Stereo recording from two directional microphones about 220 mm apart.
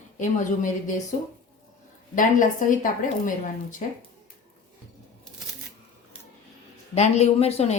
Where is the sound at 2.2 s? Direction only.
35° left (ahead or behind).